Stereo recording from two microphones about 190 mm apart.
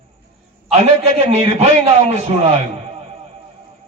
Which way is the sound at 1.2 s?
35° right (ahead or behind).